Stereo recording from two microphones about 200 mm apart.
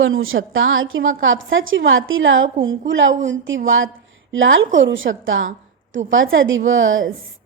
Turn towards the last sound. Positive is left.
turn(degrees=-75)  # may be behind; listen again after turning